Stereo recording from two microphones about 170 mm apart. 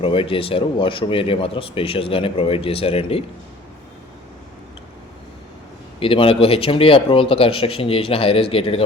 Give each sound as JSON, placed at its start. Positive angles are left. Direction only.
{"t": 0.0, "sound": "speech", "side_deg": 30}
{"t": 6.0, "sound": "speech", "side_deg": 30}